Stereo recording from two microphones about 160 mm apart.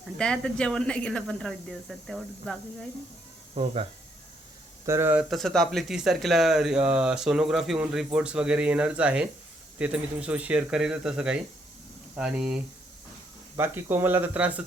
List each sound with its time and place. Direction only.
0.2 s speech: 5° left (ahead or behind)
3.5 s speech: 35° right (ahead or behind)
4.9 s speech: 15° right (ahead or behind)
5.3 s speech: centre (ahead or behind)